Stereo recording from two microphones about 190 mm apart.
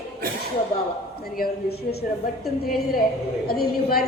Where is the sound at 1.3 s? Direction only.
50° left (ahead or behind).